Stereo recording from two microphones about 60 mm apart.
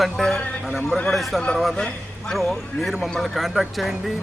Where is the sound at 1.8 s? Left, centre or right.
Centre.